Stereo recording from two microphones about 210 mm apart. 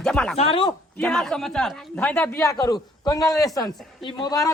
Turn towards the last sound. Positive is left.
turn(degrees=15)  # may be behind; listen again after turning